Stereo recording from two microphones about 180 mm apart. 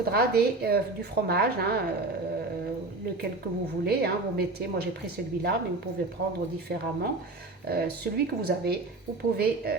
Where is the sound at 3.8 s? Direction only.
60° right (ahead or behind).